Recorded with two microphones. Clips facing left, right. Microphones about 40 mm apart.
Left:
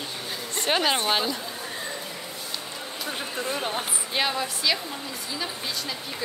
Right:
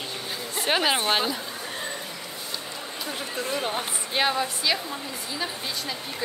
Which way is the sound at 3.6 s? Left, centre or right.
Centre.